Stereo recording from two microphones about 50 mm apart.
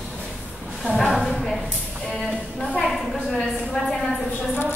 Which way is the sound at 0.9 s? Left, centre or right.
Centre.